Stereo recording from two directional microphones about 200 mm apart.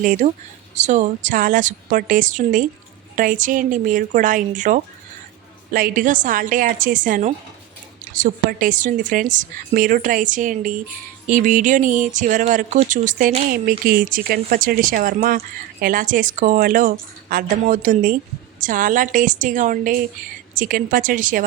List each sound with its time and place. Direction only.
0.0 s a woman's voice: 40° right (ahead or behind)